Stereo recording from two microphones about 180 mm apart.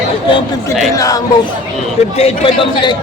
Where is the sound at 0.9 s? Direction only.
20° left (ahead or behind).